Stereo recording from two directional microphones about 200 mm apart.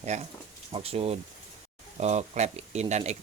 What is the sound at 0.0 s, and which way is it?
Speech, 35° right (ahead or behind).